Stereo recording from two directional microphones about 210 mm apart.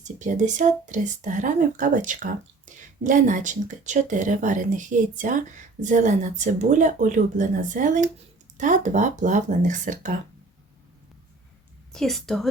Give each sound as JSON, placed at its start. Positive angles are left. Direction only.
{"t": 0.0, "sound": "speech", "side_deg": -35}
{"t": 11.9, "sound": "a woman's voice", "side_deg": 0}